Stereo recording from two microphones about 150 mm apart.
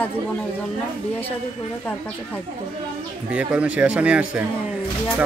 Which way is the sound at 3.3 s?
10° right (ahead or behind).